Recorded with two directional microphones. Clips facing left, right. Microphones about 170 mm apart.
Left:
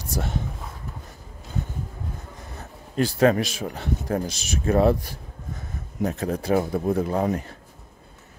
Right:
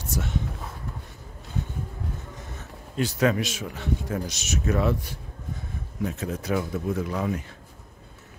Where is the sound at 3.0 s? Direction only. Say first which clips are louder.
Left 4 dB; 35° left (ahead or behind).